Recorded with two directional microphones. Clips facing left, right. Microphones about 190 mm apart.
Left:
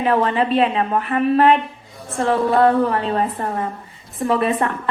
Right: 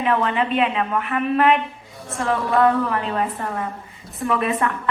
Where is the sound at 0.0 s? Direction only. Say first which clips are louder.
Left 3 dB; 35° left (ahead or behind).